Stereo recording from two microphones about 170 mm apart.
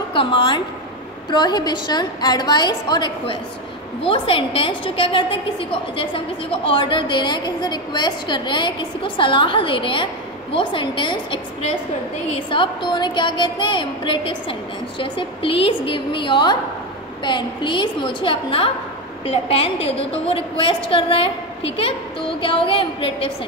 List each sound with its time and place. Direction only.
0.1 s a woman's voice: 30° left (ahead or behind)